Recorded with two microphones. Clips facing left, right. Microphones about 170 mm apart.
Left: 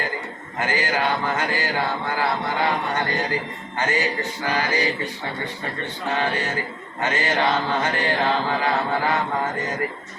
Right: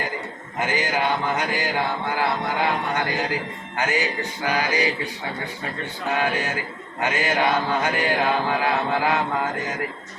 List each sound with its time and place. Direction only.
0.6 s chant: 20° right (ahead or behind)
6.1 s chant: 10° right (ahead or behind)